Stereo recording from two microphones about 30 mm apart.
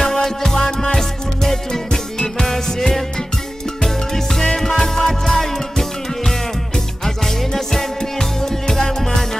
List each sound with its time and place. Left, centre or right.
0.0 s music: centre
7.5 s music: centre